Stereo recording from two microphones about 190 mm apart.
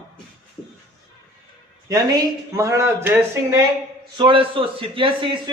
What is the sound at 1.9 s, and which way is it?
Speech, 20° right (ahead or behind).